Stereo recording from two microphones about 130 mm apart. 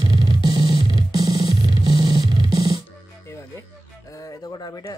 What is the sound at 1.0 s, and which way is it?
Music, 30° right (ahead or behind).